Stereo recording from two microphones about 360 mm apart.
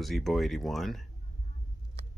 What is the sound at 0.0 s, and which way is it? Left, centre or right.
Speech, centre.